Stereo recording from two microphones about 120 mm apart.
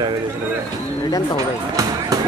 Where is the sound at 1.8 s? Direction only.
30° right (ahead or behind).